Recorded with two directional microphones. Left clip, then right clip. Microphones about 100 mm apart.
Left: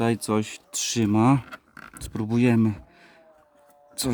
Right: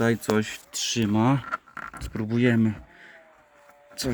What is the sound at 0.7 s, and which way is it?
Speech, 60° left (ahead or behind).